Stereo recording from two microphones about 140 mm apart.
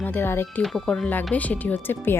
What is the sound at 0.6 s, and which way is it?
Speech, 5° left (ahead or behind).